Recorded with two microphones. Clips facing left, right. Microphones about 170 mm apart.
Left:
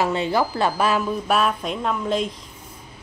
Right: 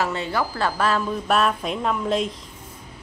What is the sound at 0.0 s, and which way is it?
A woman's voice, 15° left (ahead or behind).